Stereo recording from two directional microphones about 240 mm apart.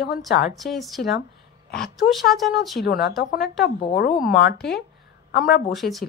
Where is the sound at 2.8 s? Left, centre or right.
Left.